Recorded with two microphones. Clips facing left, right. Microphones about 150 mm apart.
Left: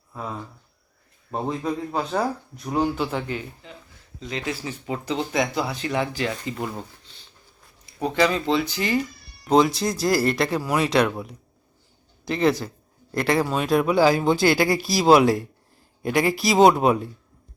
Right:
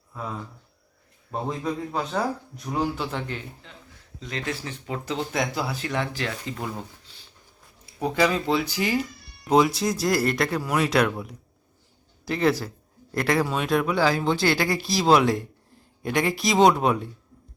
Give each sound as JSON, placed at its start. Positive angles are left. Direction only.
{"t": 1.3, "sound": "speech", "side_deg": 0}
{"t": 7.1, "sound": "a sound", "side_deg": -10}
{"t": 8.0, "sound": "speech", "side_deg": -5}